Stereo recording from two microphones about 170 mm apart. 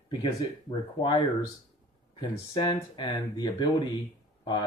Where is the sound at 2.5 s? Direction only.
25° left (ahead or behind).